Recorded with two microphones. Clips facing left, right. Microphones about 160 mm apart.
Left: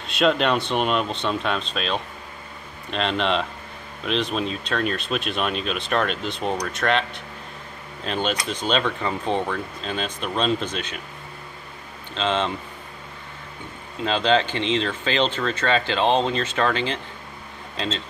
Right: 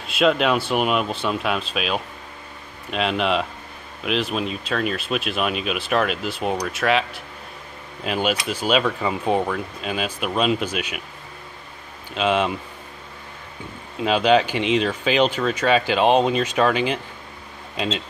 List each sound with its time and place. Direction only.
0.0 s speech: 5° right (ahead or behind)
12.1 s speech: 10° right (ahead or behind)
14.0 s speech: 10° right (ahead or behind)